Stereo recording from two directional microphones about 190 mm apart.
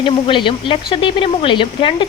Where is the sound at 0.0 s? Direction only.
25° left (ahead or behind).